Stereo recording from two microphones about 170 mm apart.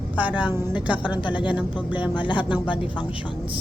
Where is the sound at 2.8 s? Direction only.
30° left (ahead or behind).